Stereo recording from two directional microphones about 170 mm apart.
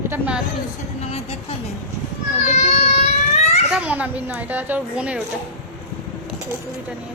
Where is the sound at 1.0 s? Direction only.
40° left (ahead or behind).